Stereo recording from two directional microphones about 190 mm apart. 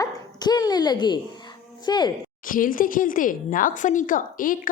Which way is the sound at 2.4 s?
45° left (ahead or behind).